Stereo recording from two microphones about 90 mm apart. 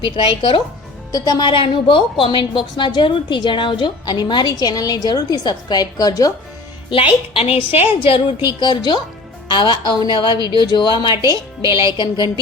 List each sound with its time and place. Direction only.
0.0 s a woman's voice: 65° left (ahead or behind)
1.1 s a woman's voice: 50° left (ahead or behind)
1.5 s a woman's voice: 75° left (ahead or behind); by 6.3 s 45° left (ahead or behind)
6.9 s a woman's voice: 90° left
7.9 s a woman's voice: 70° left (ahead or behind)
11.6 s speech: 40° right (ahead or behind)
11.9 s a woman's voice: 60° left (ahead or behind)